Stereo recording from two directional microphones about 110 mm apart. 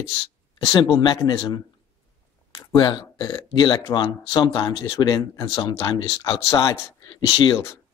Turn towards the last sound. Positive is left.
turn(degrees=40)  # may be behind; listen again after turning